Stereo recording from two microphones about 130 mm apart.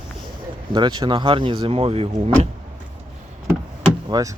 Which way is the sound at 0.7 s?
35° right (ahead or behind).